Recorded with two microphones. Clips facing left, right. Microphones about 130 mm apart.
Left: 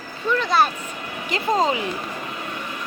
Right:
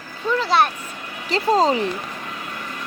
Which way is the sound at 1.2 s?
35° right (ahead or behind).